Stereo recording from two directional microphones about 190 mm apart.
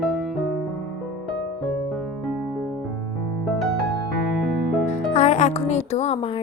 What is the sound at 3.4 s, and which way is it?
Music, centre (ahead or behind).